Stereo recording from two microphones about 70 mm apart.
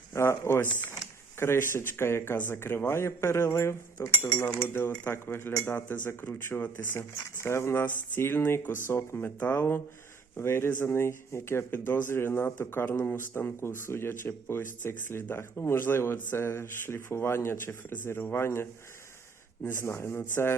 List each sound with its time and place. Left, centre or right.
0.1 s speech: left